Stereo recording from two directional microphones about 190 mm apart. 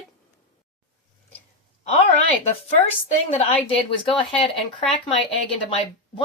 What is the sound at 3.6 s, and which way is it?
Speech, 30° left (ahead or behind).